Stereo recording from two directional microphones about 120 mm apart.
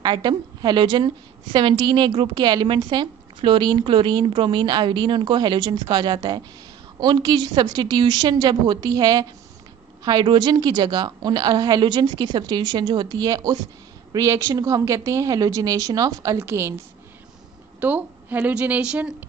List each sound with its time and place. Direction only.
0.0 s a woman's voice: 40° right (ahead or behind); by 16.7 s 20° right (ahead or behind)
17.7 s a woman's voice: 15° right (ahead or behind)